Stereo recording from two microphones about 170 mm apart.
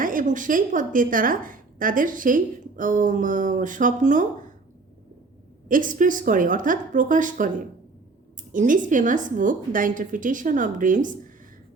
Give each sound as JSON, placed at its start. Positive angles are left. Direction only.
{"t": 0.0, "sound": "a woman's voice", "side_deg": -50}
{"t": 5.6, "sound": "a woman's voice", "side_deg": -50}
{"t": 8.5, "sound": "a woman's voice", "side_deg": -50}